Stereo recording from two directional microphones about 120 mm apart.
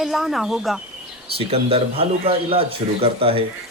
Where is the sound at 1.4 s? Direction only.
50° right (ahead or behind).